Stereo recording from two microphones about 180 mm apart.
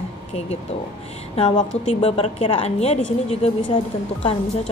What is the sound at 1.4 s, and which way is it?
A woman's voice, 25° left (ahead or behind).